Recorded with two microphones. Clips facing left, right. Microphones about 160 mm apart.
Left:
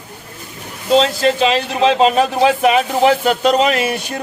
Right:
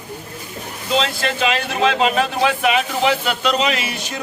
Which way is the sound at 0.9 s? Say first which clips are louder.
Left 7 dB; 35° left (ahead or behind).